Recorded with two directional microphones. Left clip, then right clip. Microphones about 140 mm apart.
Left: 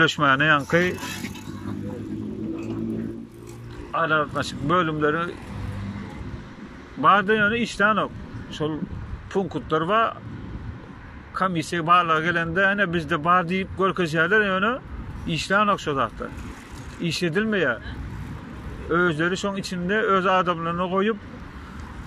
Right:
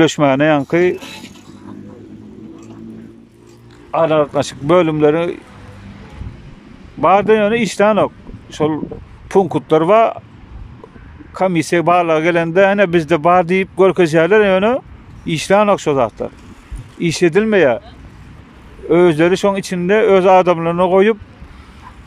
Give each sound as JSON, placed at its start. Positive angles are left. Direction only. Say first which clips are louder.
{"t": 0.0, "sound": "speech", "louder": "right 6 dB", "side_deg": -50}
{"t": 3.9, "sound": "speech", "louder": "right 9 dB", "side_deg": -50}
{"t": 7.0, "sound": "speech", "louder": "right 7 dB", "side_deg": -50}
{"t": 11.3, "sound": "speech", "louder": "right 10 dB", "side_deg": -55}
{"t": 18.9, "sound": "speech", "louder": "right 11 dB", "side_deg": -55}